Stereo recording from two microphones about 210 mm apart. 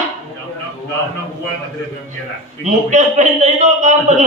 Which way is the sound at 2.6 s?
35° right (ahead or behind).